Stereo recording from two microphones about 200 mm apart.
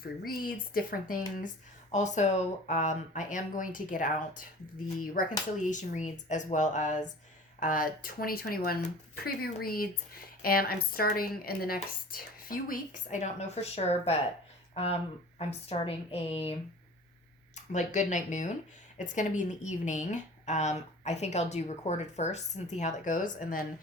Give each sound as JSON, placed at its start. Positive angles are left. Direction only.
{"t": 0.0, "sound": "a woman's voice", "side_deg": 45}
{"t": 5.6, "sound": "a woman's voice", "side_deg": 40}